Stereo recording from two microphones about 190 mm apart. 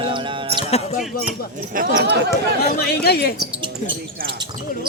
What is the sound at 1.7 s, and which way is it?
Speech, 45° right (ahead or behind).